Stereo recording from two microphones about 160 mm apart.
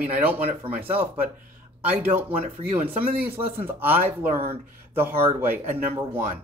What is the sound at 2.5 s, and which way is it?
Speech, 40° right (ahead or behind).